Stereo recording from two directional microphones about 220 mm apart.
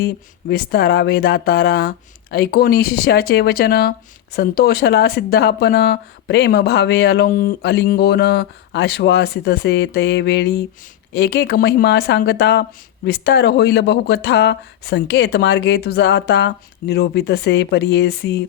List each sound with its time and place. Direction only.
0.0 s speech: 45° left (ahead or behind)